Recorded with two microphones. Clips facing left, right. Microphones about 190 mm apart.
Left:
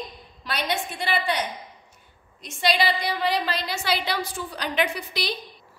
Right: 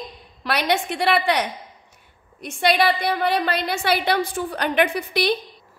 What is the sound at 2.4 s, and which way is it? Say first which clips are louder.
A woman's voice: right 4 dB; 60° right (ahead or behind).